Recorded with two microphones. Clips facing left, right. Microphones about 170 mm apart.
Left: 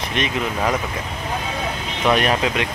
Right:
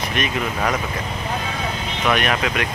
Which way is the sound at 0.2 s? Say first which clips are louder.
Left 1 dB; 25° left (ahead or behind).